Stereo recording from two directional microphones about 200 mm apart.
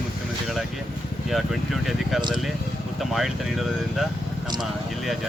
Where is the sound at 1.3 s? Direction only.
Centre (ahead or behind).